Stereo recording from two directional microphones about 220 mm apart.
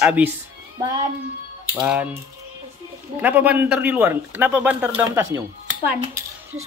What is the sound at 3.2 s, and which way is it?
A man's voice, 5° right (ahead or behind).